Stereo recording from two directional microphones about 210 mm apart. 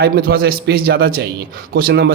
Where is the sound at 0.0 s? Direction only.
45° right (ahead or behind).